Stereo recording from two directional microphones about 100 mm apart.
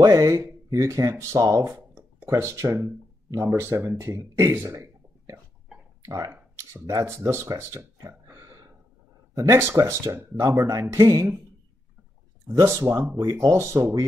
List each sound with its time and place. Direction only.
0.0 s speech: 35° right (ahead or behind)
9.6 s speech: 25° right (ahead or behind)
12.4 s speech: 35° right (ahead or behind)
12.8 s speech: 20° right (ahead or behind)
13.2 s speech: 40° right (ahead or behind)